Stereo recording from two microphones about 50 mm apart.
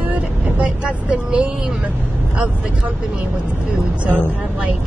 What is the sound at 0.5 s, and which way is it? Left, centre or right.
Speech, right.